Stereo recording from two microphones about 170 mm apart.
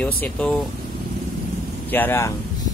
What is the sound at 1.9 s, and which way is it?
Speech, 10° left (ahead or behind).